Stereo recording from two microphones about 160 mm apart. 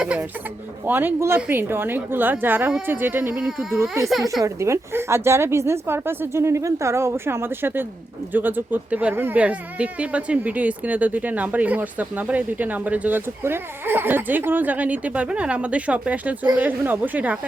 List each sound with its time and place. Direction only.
0.0 s speech: 5° right (ahead or behind)
4.4 s speech: 15° right (ahead or behind)